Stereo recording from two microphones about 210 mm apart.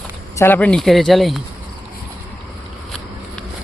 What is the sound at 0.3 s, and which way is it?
Speech, 10° left (ahead or behind).